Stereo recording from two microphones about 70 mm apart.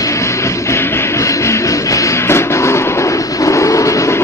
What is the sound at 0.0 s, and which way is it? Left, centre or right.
Music, left.